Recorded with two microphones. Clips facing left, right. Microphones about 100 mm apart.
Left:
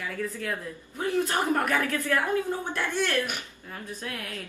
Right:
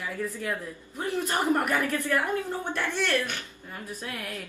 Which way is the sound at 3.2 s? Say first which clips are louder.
Left 3 dB; 15° left (ahead or behind).